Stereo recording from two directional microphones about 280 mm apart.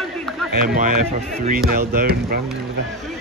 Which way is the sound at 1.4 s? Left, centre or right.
Right.